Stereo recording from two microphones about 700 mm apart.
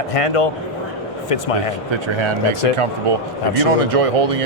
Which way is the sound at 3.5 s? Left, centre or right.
Right.